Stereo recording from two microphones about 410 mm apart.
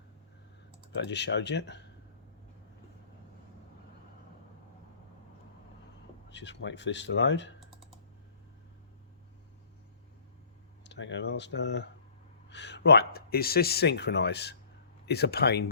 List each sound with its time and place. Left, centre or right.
0.9 s speech: left
6.2 s speech: left
10.8 s speech: left